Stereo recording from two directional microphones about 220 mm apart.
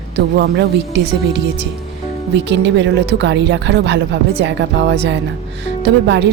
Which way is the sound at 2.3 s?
55° right (ahead or behind).